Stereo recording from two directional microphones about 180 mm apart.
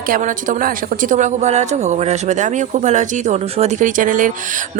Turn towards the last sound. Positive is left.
turn(degrees=-45)  # may be behind; listen again after turning